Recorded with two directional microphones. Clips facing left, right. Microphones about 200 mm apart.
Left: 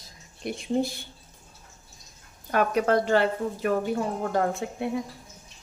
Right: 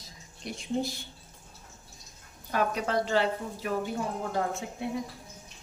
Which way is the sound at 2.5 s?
60° left (ahead or behind).